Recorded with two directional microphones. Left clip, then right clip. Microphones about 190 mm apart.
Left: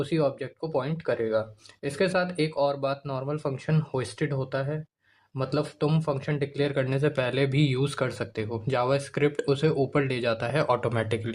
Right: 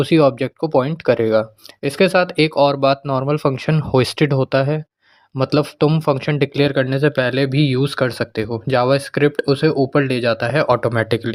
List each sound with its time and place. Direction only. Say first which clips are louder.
0.0 s speech: right 12 dB; 40° right (ahead or behind)